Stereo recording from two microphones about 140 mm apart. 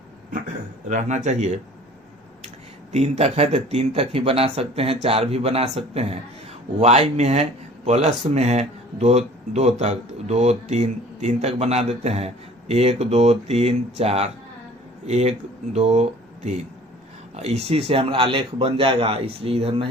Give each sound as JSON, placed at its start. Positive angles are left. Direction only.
{"t": 0.9, "sound": "speech", "side_deg": -60}
{"t": 2.9, "sound": "a man's voice", "side_deg": -50}